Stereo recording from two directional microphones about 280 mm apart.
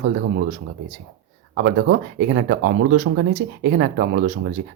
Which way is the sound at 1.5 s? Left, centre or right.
Right.